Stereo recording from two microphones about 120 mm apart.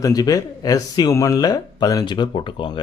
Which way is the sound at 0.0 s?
30° left (ahead or behind).